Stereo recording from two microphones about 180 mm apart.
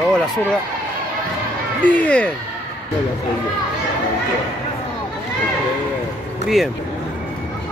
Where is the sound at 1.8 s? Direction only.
10° left (ahead or behind).